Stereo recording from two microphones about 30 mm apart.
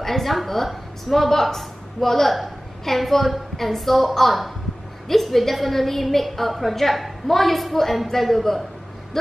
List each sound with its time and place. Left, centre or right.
0.0 s a woman's voice: centre
9.1 s vehicle: centre